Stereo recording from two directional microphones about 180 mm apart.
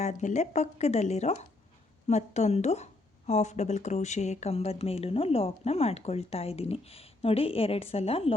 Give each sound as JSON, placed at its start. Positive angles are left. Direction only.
{"t": 0.0, "sound": "speech", "side_deg": 40}